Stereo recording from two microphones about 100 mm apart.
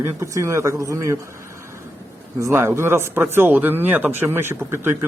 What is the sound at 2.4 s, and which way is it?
Speech, 25° right (ahead or behind).